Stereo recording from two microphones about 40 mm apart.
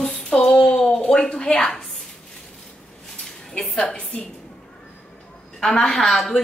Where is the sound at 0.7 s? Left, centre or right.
Centre.